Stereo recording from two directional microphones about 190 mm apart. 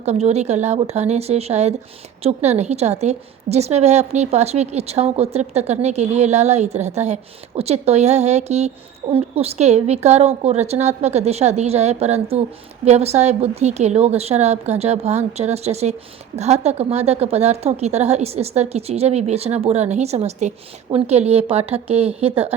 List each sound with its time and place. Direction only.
0.0 s a woman's voice: 35° right (ahead or behind)